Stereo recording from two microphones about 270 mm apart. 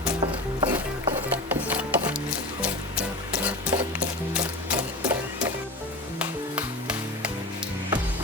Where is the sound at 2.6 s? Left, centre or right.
Centre.